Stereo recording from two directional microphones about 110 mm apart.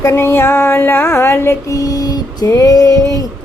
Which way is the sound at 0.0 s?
25° left (ahead or behind).